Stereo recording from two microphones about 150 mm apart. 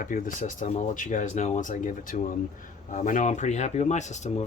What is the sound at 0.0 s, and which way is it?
Speech, 65° left (ahead or behind).